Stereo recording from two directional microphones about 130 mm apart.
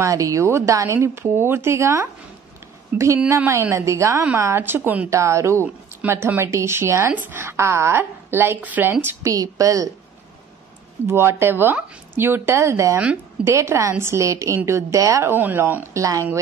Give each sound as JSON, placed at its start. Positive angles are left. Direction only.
{"t": 0.0, "sound": "a woman's voice", "side_deg": -25}
{"t": 11.1, "sound": "speech", "side_deg": -20}
{"t": 13.0, "sound": "a woman's voice", "side_deg": -10}
{"t": 13.5, "sound": "speech", "side_deg": -20}